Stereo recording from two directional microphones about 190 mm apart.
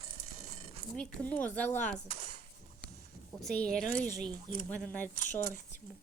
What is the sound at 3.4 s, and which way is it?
Speech, centre (ahead or behind).